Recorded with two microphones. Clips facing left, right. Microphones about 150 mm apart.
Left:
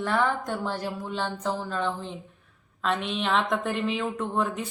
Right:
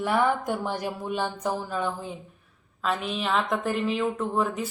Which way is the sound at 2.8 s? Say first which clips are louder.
Even; centre (ahead or behind).